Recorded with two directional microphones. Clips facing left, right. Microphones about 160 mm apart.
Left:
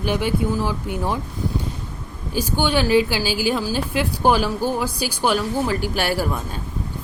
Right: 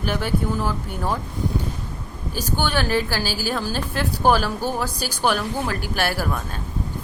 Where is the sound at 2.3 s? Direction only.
15° left (ahead or behind).